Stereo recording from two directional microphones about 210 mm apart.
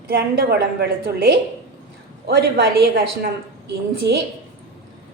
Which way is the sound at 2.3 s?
45° right (ahead or behind).